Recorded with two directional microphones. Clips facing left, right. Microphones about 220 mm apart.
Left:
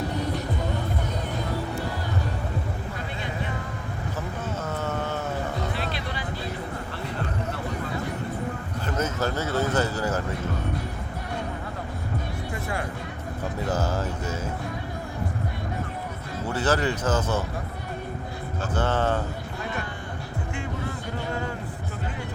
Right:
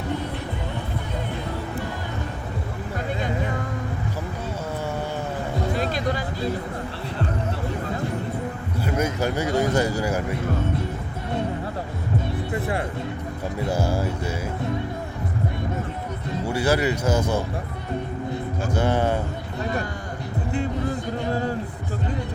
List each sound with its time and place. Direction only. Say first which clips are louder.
5.7 s music: right 7 dB; 45° right (ahead or behind)
8.8 s speech: right 3 dB; 10° right (ahead or behind)
12.5 s music: right 5 dB; 30° right (ahead or behind)
13.7 s music: right 3 dB; 10° right (ahead or behind)
16.5 s speech: right 3 dB; 10° right (ahead or behind)
18.6 s speech: right 2 dB; 10° right (ahead or behind)